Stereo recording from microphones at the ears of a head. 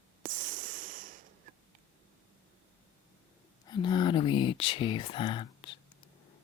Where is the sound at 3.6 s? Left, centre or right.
Left.